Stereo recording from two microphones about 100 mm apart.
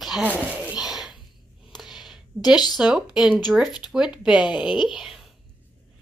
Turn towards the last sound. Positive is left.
turn(degrees=-5)  # may be behind; listen again after turning